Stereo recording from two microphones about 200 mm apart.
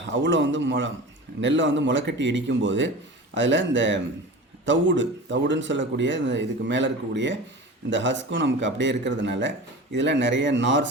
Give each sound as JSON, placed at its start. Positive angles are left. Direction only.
{"t": 0.0, "sound": "speech", "side_deg": -65}